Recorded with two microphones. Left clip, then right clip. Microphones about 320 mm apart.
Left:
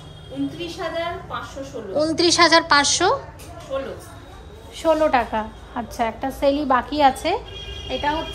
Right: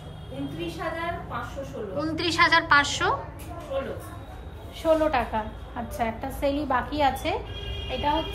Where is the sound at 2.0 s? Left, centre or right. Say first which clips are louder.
Left 7 dB; centre.